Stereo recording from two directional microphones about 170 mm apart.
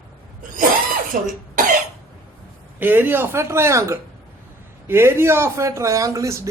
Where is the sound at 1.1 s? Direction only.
55° right (ahead or behind).